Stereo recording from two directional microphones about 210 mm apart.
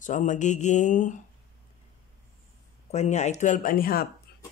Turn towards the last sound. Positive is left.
turn(degrees=45)  # may be behind; listen again after turning